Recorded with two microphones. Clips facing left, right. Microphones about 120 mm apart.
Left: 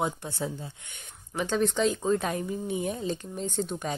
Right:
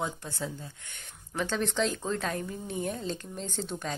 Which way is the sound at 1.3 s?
10° left (ahead or behind).